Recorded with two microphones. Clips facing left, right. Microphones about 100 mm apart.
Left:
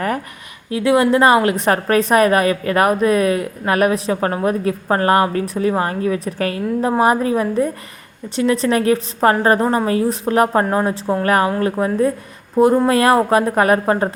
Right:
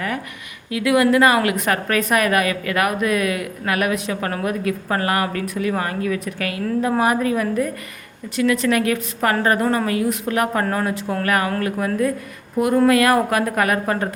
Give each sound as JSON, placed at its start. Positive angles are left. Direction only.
{"t": 0.7, "sound": "a woman's voice", "side_deg": 30}